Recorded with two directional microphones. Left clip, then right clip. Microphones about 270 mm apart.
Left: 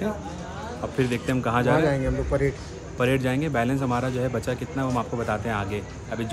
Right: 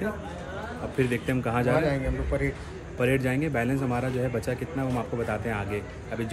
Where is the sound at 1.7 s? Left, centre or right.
Left.